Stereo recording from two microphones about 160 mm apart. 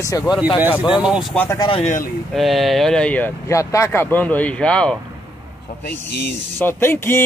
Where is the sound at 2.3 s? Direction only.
Centre (ahead or behind).